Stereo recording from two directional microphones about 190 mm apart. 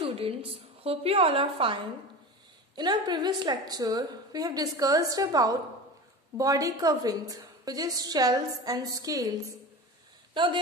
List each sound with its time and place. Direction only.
0.0 s a woman's voice: 30° right (ahead or behind)
10.3 s speech: 25° right (ahead or behind)